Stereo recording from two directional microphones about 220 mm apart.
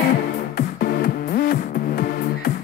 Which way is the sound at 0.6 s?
45° left (ahead or behind).